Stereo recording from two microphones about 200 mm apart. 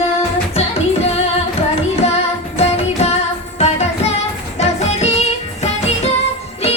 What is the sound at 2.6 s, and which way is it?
Music, 35° left (ahead or behind).